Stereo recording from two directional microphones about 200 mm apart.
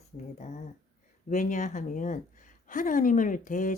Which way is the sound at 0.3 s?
35° left (ahead or behind).